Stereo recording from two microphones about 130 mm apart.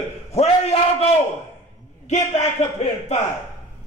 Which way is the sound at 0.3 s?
50° left (ahead or behind).